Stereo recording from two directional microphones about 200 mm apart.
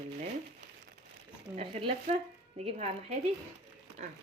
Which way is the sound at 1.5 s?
30° right (ahead or behind).